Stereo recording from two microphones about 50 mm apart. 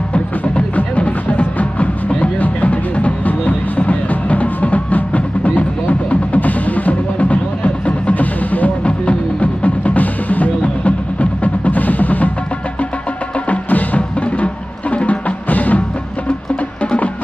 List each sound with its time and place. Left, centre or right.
0.1 s music: left
13.5 s music: left